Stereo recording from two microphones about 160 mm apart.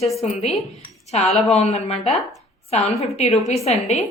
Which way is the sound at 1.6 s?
40° left (ahead or behind).